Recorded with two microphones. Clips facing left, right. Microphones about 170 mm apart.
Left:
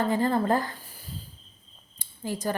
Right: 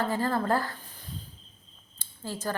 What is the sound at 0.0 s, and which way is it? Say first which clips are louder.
Speech: left 3 dB; 20° left (ahead or behind).